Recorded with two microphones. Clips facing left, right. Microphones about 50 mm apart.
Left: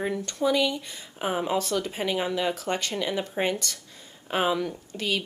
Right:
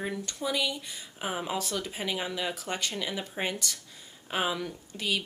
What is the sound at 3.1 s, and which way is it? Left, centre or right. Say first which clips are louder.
Speech: left 6 dB; centre.